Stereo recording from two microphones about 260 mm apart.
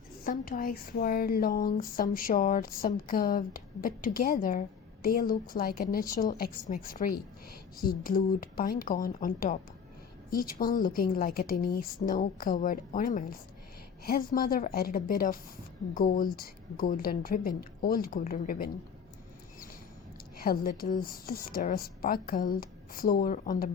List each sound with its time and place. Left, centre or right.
0.3 s speech: left
20.4 s speech: left